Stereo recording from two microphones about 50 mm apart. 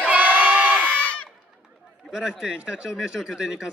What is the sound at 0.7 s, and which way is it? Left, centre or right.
Crowd, left.